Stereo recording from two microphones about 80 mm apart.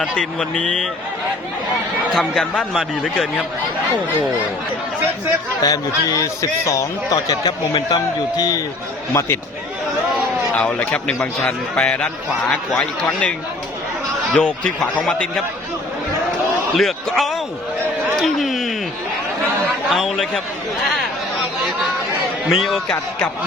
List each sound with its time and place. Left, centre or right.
0.0 s a man's voice: centre
2.1 s a man's voice: centre
5.6 s a man's voice: left
7.4 s a man's voice: left
10.5 s a man's voice: centre
14.3 s a man's voice: centre
16.7 s a man's voice: centre
18.2 s a sound: centre
19.9 s speech: centre
22.4 s speech: centre